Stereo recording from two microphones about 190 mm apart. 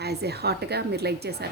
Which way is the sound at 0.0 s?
60° right (ahead or behind).